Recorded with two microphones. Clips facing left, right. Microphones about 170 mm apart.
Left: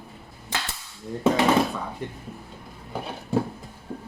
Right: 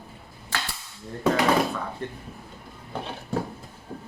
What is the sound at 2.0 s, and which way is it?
Speech, 15° left (ahead or behind).